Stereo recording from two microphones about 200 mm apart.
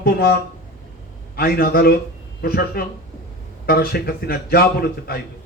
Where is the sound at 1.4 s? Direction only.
50° left (ahead or behind).